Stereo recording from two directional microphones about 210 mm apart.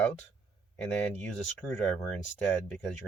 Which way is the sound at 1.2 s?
5° left (ahead or behind).